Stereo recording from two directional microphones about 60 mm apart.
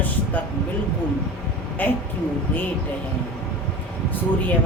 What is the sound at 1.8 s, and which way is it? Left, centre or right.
Speech, left.